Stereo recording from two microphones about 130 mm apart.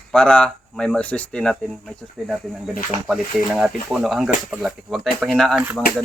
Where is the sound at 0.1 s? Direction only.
5° left (ahead or behind); by 5.8 s 10° right (ahead or behind).